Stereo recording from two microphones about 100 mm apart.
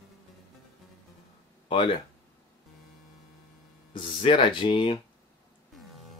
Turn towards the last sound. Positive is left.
turn(degrees=55)  # may be behind; listen again after turning